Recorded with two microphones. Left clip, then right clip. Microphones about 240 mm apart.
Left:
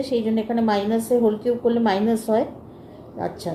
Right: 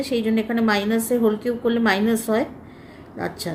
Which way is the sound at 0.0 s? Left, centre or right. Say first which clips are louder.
Even; right.